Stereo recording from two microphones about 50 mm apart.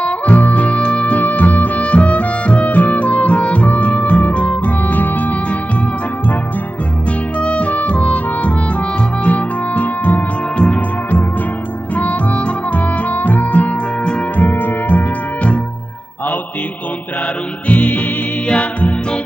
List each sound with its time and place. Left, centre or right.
0.0 s music: left
7.3 s music: left
11.9 s music: left
17.6 s music: left